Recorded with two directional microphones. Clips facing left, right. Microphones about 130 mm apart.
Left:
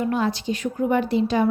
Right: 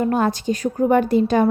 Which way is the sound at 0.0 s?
45° right (ahead or behind).